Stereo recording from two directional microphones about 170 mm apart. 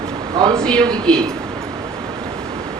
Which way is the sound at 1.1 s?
5° left (ahead or behind).